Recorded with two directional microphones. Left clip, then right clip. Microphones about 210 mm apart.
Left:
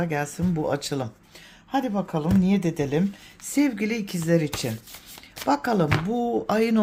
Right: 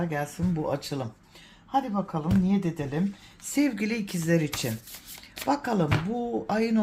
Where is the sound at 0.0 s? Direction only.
25° left (ahead or behind).